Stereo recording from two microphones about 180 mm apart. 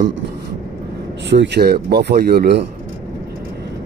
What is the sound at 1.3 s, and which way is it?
Speech, 70° right (ahead or behind).